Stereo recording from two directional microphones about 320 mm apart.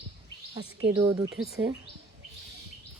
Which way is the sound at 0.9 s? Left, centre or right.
Centre.